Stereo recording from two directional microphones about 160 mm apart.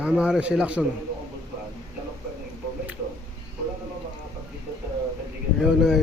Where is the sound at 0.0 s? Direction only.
5° right (ahead or behind).